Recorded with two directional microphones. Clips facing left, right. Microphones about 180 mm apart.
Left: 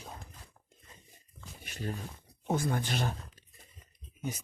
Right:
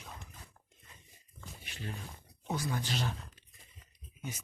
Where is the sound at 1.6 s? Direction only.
45° left (ahead or behind).